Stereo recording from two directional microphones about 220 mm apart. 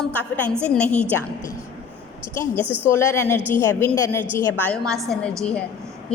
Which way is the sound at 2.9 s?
10° left (ahead or behind).